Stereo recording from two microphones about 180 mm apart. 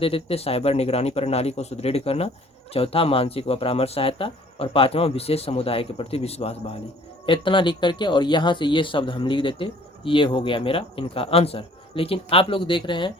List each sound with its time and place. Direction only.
0.0 s speech: 30° left (ahead or behind)